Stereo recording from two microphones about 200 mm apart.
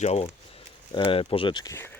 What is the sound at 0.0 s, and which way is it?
Speech, 30° left (ahead or behind).